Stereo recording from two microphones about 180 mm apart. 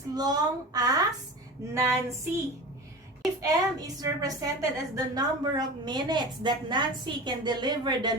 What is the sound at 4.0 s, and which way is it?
A woman's voice, 20° right (ahead or behind).